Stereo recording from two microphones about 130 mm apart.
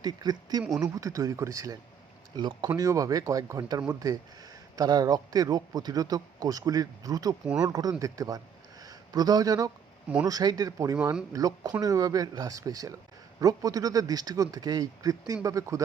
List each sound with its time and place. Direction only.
0.0 s speech: 30° right (ahead or behind)
4.8 s speech: 30° right (ahead or behind)
8.8 s a sound: 30° right (ahead or behind)
10.2 s speech: 30° right (ahead or behind)
10.9 s speech: 10° right (ahead or behind)
11.3 s speech: 30° right (ahead or behind)